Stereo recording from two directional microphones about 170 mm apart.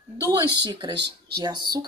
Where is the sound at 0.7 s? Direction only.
25° right (ahead or behind).